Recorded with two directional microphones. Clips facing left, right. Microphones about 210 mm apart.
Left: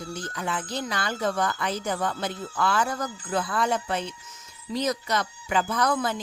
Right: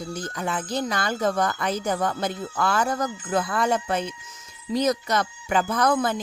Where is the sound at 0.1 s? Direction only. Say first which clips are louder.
Right 2 dB; 40° right (ahead or behind).